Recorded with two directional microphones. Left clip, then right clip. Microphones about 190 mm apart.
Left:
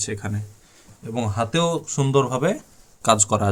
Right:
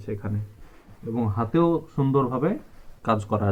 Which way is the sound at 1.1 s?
70° left (ahead or behind).